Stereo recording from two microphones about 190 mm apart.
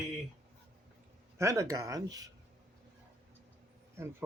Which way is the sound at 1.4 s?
15° right (ahead or behind).